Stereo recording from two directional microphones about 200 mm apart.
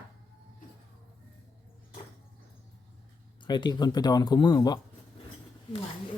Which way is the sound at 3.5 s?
20° left (ahead or behind).